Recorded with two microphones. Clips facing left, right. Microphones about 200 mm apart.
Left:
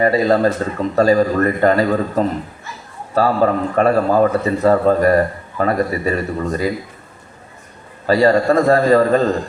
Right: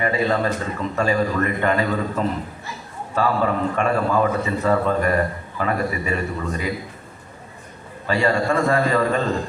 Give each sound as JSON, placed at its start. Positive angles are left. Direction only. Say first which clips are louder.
{"t": 0.0, "sound": "a man's voice", "louder": "left 7 dB", "side_deg": 40}
{"t": 8.0, "sound": "a man's voice", "louder": "left 7 dB", "side_deg": 40}